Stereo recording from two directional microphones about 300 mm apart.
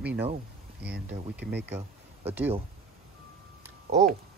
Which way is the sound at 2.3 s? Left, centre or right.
Centre.